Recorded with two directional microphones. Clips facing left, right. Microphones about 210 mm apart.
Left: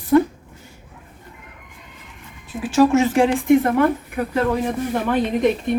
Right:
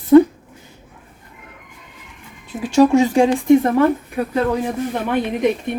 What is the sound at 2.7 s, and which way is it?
A woman's voice, 15° right (ahead or behind).